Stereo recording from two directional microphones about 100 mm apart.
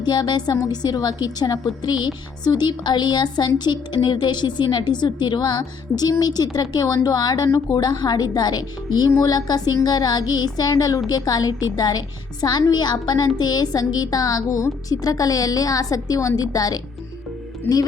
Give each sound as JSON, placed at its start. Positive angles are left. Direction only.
{"t": 0.0, "sound": "a woman's voice", "side_deg": 45}